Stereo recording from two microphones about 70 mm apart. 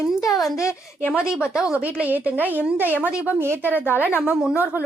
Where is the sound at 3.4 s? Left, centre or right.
Right.